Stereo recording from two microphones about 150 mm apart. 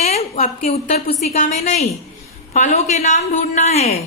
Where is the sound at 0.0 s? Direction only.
45° left (ahead or behind).